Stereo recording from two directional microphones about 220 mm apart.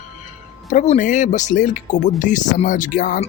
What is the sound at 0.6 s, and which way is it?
Speech, 30° left (ahead or behind).